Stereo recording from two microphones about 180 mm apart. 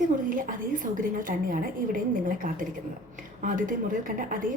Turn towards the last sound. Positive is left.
turn(degrees=-50)  # may be behind; listen again after turning